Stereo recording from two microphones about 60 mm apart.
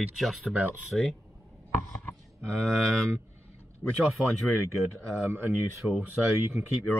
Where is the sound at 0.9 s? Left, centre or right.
Centre.